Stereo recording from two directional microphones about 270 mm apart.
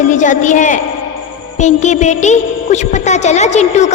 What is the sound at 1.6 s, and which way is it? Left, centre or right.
Speech, left.